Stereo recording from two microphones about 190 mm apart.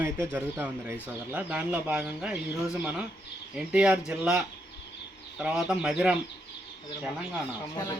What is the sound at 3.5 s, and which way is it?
Speech, 5° right (ahead or behind).